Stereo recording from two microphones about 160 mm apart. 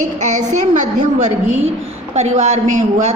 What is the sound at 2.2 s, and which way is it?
Speech, 45° right (ahead or behind).